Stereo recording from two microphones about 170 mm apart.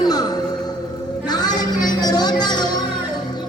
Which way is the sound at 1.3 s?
25° left (ahead or behind).